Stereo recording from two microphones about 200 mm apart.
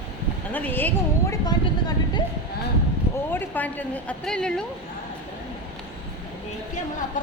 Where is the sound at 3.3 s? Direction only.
10° left (ahead or behind).